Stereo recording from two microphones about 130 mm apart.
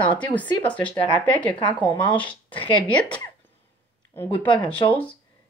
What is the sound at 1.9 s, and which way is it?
Speech, 40° left (ahead or behind).